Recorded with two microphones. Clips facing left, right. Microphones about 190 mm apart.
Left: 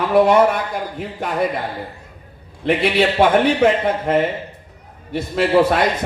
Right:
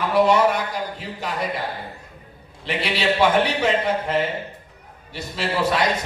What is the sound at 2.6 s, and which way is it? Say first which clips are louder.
A man's voice: left 7 dB; 55° left (ahead or behind).